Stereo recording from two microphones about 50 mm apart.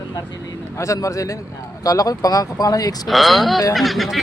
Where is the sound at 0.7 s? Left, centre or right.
Left.